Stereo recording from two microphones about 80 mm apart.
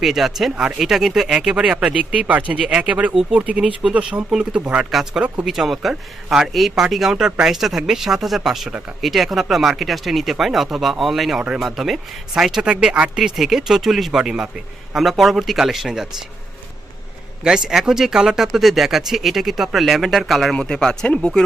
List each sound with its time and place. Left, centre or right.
0.0 s speech: centre
4.9 s speech: centre
17.4 s speech: centre